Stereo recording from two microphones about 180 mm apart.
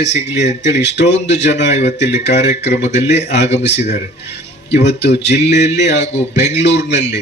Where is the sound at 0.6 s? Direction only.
75° left (ahead or behind).